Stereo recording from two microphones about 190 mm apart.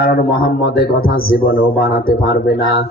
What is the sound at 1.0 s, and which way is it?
Speech, 90° left.